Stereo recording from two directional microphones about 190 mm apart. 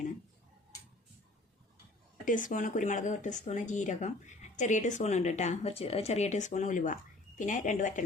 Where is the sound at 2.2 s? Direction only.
45° left (ahead or behind).